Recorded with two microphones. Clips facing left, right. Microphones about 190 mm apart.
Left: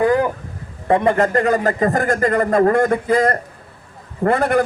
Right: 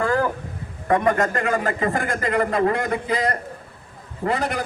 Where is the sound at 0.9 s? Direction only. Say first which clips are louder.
Left 4 dB; 30° left (ahead or behind).